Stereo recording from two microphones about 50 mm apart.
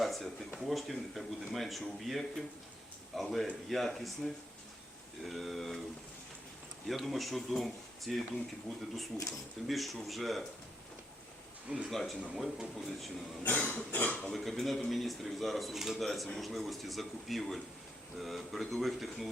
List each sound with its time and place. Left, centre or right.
0.0 s a sound: centre
0.6 s speech: centre
6.8 s speech: centre
11.9 s speech: centre
13.4 s cough: left
14.1 s speech: centre
14.3 s speech: centre